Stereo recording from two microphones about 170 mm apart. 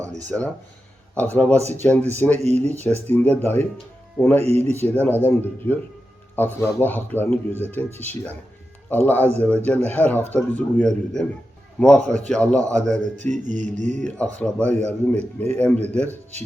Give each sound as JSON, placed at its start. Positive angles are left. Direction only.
{"t": 0.3, "sound": "a man's voice", "side_deg": 5}
{"t": 4.4, "sound": "speech", "side_deg": -40}
{"t": 4.7, "sound": "a man's voice", "side_deg": 10}
{"t": 13.1, "sound": "mantra", "side_deg": -45}
{"t": 14.3, "sound": "a man's voice", "side_deg": 10}